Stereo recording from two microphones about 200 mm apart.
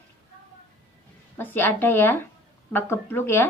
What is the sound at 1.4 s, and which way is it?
A woman's voice, 10° left (ahead or behind).